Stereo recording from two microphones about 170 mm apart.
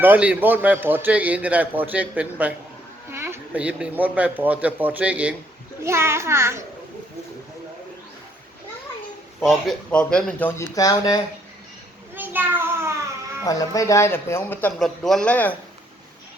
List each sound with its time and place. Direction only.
0.0 s a man's voice: 10° right (ahead or behind)
9.4 s a man's voice: centre (ahead or behind)
10.8 s speech: 20° left (ahead or behind)
12.1 s a sound: 10° right (ahead or behind)
13.4 s speech: 20° left (ahead or behind)
14.8 s a man's voice: centre (ahead or behind)